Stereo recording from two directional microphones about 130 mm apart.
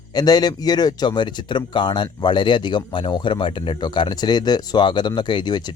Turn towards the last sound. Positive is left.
turn(degrees=35)  # may be behind; listen again after turning